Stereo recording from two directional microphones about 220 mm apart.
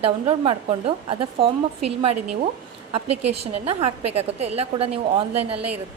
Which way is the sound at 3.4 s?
30° right (ahead or behind).